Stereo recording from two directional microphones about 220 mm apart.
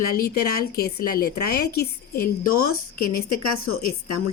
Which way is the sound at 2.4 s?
80° left.